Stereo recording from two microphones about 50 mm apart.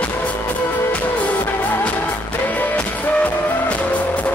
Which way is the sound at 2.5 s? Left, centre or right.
Left.